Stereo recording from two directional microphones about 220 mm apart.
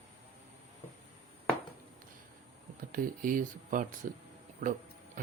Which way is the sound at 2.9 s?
40° right (ahead or behind).